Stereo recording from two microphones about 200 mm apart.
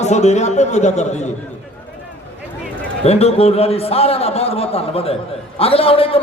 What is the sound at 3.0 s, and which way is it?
A man's voice, 30° left (ahead or behind).